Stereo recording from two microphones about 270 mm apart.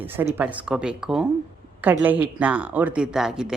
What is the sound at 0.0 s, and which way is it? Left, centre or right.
A woman's voice, centre.